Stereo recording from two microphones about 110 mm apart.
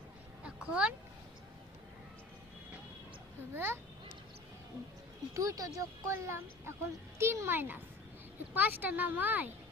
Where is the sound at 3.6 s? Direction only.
20° right (ahead or behind).